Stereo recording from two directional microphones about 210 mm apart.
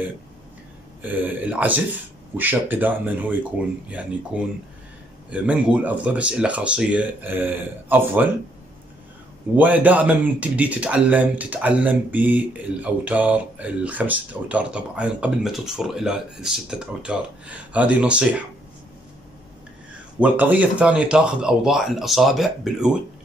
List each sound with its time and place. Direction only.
1.0 s speech: 10° right (ahead or behind)
9.6 s speech: 5° right (ahead or behind)
20.2 s speech: 5° right (ahead or behind)